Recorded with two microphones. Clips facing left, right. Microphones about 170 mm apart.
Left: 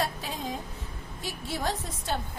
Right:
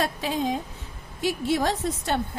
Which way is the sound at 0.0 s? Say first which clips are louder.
Right 6 dB; 90° right.